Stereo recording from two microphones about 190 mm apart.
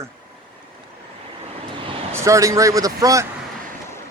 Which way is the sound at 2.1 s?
15° right (ahead or behind).